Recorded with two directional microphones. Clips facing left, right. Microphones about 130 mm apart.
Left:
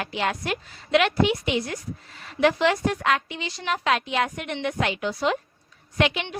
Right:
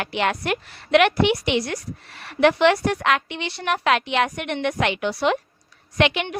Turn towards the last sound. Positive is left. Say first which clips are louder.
# right 3 dB
turn(degrees=-65)  # may be behind; listen again after turning